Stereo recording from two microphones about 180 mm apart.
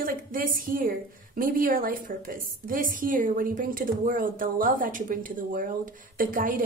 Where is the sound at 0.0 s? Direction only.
50° right (ahead or behind).